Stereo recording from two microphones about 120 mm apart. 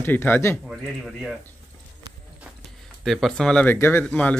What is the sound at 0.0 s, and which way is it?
Speech, 15° left (ahead or behind).